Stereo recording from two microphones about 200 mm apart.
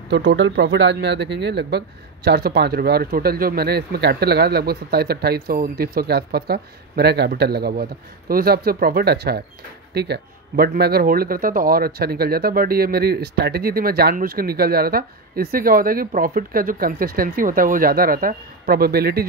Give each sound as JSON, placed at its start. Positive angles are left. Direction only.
{"t": 0.1, "sound": "speech", "side_deg": -60}